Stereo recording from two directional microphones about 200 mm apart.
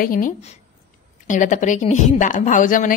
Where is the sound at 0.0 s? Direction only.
45° left (ahead or behind).